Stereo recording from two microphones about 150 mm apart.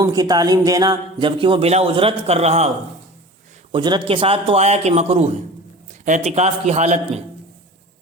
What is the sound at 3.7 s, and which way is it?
Speech, 30° right (ahead or behind).